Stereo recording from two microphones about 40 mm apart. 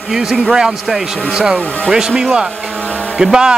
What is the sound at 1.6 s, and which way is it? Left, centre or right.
Speech, left.